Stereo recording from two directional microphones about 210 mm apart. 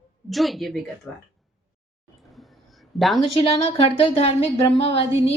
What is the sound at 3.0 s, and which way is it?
Speech, centre (ahead or behind).